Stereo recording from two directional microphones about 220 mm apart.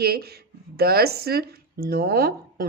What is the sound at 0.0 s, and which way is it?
Speech, 45° right (ahead or behind).